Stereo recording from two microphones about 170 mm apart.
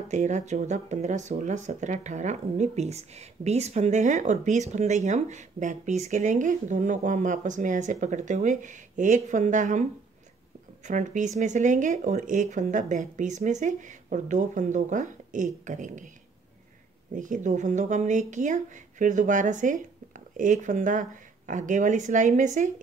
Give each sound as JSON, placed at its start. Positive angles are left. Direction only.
{"t": 0.1, "sound": "speech", "side_deg": -45}
{"t": 10.9, "sound": "speech", "side_deg": -45}
{"t": 17.1, "sound": "speech", "side_deg": -50}